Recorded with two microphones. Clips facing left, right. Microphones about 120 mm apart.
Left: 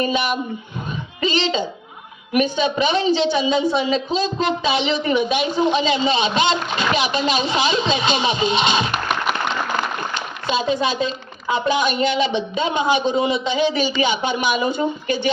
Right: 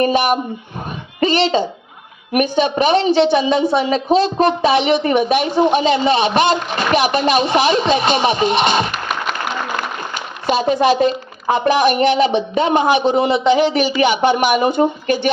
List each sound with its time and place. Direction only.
0.0 s speech: 55° right (ahead or behind)
0.9 s a sound: 55° right (ahead or behind)
2.3 s speech: 55° right (ahead or behind)
10.4 s speech: 60° right (ahead or behind)